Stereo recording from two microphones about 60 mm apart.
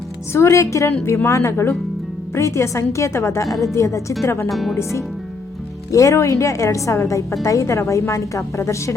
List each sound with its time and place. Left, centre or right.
0.3 s a woman's voice: left
4.4 s speech: centre
4.8 s a woman's voice: left